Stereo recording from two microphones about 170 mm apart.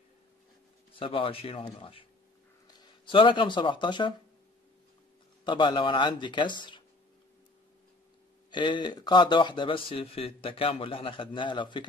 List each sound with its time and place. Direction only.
0.9 s speech: 30° left (ahead or behind)
5.4 s speech: 25° left (ahead or behind)
8.5 s speech: 25° left (ahead or behind)